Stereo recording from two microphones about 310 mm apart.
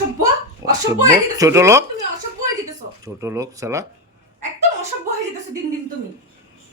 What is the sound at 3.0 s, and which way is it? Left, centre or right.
Speech, centre.